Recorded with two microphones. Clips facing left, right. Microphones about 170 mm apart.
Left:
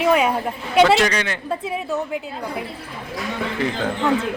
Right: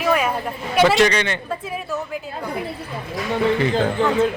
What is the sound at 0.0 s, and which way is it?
Speech, 15° left (ahead or behind).